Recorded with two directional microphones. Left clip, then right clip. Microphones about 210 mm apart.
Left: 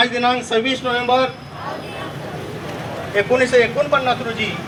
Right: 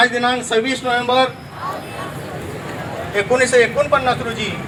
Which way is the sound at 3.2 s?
40° right (ahead or behind).